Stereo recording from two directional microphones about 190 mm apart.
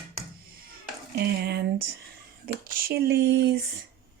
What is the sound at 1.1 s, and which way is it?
Speech, 55° right (ahead or behind).